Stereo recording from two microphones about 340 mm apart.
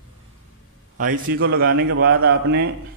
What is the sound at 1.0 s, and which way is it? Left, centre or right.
A man's voice, right.